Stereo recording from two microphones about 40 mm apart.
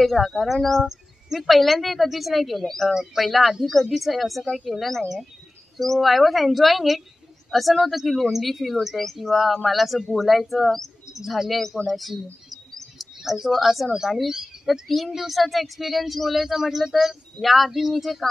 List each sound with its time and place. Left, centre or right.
0.0 s speech: centre
0.8 s speech: centre
12.7 s bird: centre
13.9 s speech: centre